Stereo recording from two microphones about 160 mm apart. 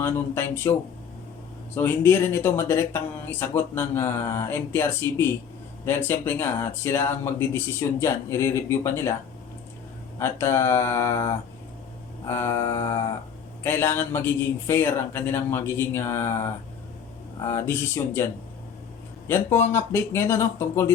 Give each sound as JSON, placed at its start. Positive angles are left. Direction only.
{"t": 0.0, "sound": "speech", "side_deg": 15}
{"t": 10.2, "sound": "speech", "side_deg": 15}
{"t": 19.3, "sound": "speech", "side_deg": 15}